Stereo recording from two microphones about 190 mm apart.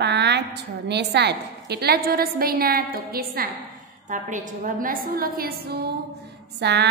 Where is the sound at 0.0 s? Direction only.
65° right (ahead or behind).